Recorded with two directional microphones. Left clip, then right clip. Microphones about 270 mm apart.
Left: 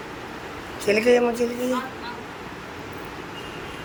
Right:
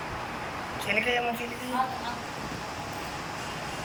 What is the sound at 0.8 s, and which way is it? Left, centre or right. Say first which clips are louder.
Speech: left 9 dB; centre.